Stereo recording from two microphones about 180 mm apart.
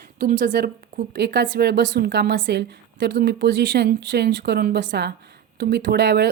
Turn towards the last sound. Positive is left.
turn(degrees=-65)  # may be behind; listen again after turning